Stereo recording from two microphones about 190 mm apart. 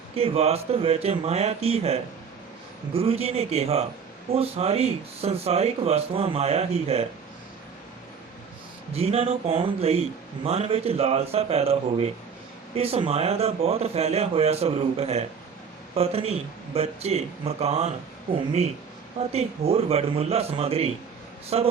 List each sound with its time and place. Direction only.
0.2 s speech: 30° right (ahead or behind)
8.9 s speech: 30° right (ahead or behind)
19.3 s speech: 30° right (ahead or behind)